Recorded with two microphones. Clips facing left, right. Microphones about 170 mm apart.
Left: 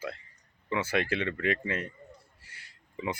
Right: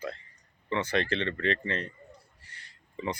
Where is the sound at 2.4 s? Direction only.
10° left (ahead or behind).